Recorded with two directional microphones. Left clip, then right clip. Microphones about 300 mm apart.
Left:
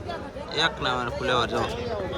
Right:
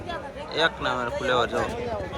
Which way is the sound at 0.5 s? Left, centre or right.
Centre.